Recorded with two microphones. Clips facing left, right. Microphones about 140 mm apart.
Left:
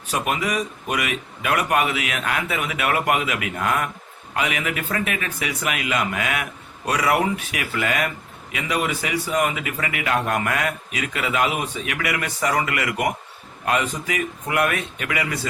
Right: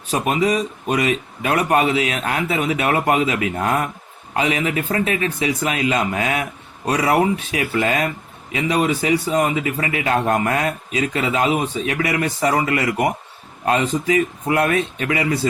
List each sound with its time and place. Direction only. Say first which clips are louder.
0.1 s speech: right 5 dB; 30° right (ahead or behind)